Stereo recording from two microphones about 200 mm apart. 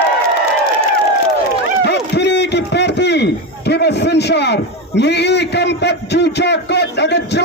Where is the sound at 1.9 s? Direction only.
55° left (ahead or behind).